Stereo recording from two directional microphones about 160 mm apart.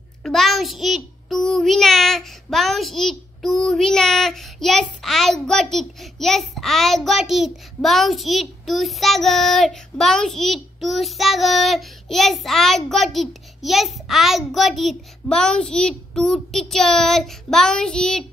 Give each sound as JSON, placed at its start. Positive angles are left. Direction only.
{"t": 0.2, "sound": "child singing", "side_deg": 0}